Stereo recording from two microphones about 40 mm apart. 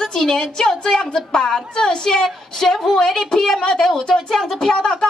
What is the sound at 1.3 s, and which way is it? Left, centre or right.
A woman's voice, centre.